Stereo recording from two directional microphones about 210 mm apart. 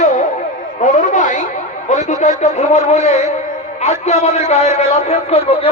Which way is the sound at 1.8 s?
35° left (ahead or behind).